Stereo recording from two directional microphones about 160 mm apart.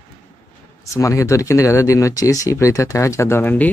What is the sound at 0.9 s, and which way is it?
Speech, 20° left (ahead or behind).